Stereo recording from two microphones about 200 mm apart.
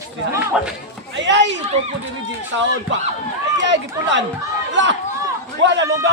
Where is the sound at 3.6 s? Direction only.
65° right (ahead or behind).